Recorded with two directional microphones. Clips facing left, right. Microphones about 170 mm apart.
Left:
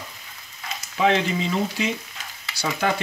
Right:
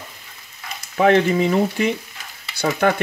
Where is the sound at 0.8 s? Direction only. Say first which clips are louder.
Right 6 dB; 55° right (ahead or behind).